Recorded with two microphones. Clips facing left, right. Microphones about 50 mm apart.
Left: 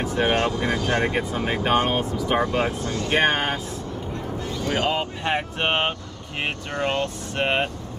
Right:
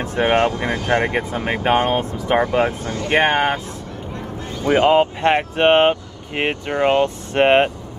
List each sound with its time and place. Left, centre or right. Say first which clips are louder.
0.1 s speech: right 6 dB; right
1.8 s speech: right 4 dB; right
2.2 s speech: right 6 dB; right
4.6 s speech: right 11 dB; right
5.6 s speech: right 10 dB; right
6.7 s speech: right 8 dB; centre
7.3 s speech: right 9 dB; right